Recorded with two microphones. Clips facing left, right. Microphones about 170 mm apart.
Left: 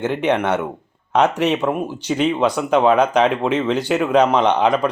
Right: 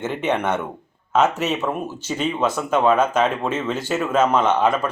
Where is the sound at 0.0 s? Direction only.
15° left (ahead or behind).